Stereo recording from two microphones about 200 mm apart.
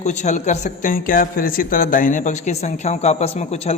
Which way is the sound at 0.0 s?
35° left (ahead or behind).